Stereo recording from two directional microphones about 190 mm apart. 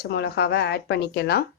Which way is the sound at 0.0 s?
60° left (ahead or behind).